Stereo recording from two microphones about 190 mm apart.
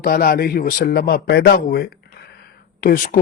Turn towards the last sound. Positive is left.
turn(degrees=50)  # may be behind; listen again after turning